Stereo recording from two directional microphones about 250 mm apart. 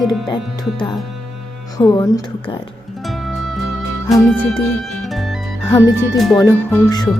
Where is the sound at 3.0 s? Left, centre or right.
Centre.